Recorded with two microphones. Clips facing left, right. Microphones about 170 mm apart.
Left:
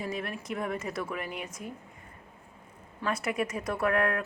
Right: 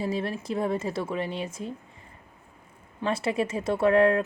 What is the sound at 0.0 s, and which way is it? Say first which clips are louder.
A woman's voice: right 6 dB; 30° right (ahead or behind).